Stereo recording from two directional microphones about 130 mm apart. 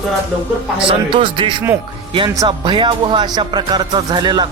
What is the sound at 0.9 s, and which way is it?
Speech, 40° right (ahead or behind).